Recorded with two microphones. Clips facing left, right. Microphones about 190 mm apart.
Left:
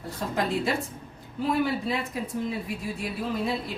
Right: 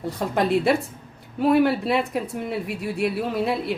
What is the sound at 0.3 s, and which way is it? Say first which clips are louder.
Speech: right 7 dB; 65° right (ahead or behind).